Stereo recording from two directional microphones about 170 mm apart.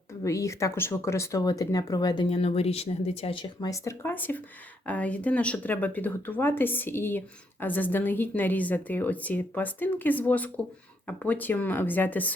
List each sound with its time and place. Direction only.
0.1 s a woman's voice: 20° left (ahead or behind)